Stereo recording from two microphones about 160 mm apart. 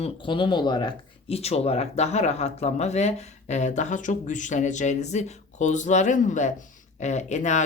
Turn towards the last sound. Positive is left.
turn(degrees=50)  # may be behind; listen again after turning